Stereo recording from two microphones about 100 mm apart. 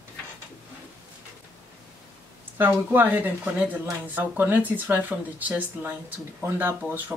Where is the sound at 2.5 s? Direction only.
20° right (ahead or behind).